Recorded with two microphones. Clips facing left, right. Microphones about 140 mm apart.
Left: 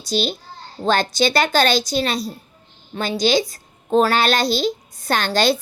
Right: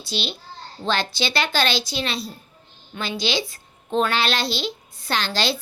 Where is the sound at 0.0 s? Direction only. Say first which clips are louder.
Left 7 dB; 40° left (ahead or behind).